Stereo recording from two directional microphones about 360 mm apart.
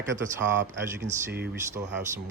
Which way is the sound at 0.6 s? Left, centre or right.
Right.